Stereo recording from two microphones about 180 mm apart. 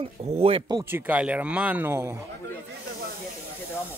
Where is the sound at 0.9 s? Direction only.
10° right (ahead or behind).